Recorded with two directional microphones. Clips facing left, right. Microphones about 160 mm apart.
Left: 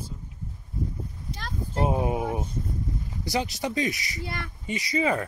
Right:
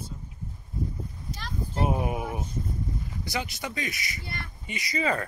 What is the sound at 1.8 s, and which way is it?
Speech, 25° left (ahead or behind).